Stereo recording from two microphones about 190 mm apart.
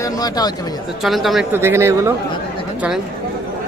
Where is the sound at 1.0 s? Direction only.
Centre (ahead or behind).